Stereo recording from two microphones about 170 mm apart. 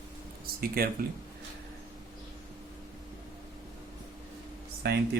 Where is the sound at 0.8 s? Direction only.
60° right (ahead or behind).